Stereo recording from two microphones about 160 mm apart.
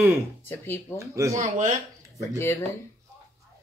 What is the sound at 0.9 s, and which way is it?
Speech, 20° right (ahead or behind).